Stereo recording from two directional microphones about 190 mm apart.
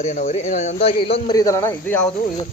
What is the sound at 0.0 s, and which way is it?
Speech, 40° left (ahead or behind).